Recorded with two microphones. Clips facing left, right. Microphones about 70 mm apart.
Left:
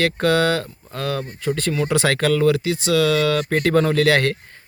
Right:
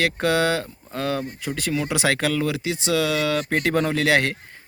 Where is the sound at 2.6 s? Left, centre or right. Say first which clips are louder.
Left 4 dB; centre.